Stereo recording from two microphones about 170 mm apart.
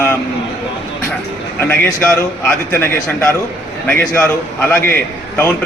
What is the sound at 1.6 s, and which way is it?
A man's voice, 10° left (ahead or behind).